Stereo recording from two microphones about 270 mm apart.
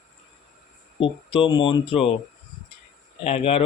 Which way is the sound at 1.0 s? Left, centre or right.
Centre.